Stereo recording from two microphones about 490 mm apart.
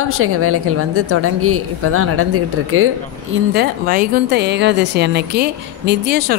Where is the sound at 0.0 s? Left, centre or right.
Right.